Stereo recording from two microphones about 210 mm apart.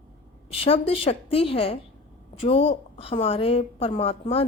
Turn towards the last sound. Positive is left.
turn(degrees=25)  # may be behind; listen again after turning